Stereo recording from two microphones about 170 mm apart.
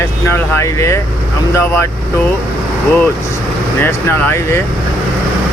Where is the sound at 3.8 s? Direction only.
15° left (ahead or behind).